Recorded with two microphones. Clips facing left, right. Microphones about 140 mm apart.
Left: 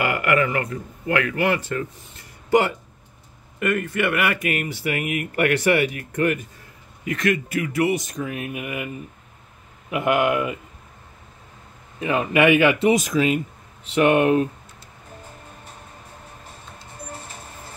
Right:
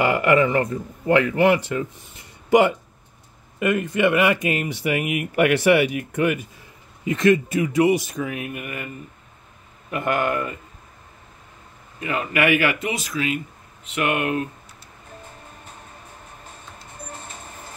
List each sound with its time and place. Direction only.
0.0 s speech: 25° right (ahead or behind)
3.5 s speech: 20° right (ahead or behind)
7.1 s speech: 25° right (ahead or behind); by 8.5 s centre (ahead or behind)
8.5 s speech: 10° left (ahead or behind)
12.0 s speech: 20° left (ahead or behind)
12.9 s speech: 45° left (ahead or behind)
13.8 s speech: 30° left (ahead or behind)